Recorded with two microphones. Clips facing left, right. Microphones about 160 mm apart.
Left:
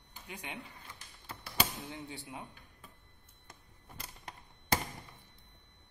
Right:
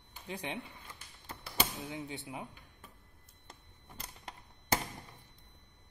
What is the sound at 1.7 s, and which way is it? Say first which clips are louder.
Speech: right 3 dB; 15° right (ahead or behind).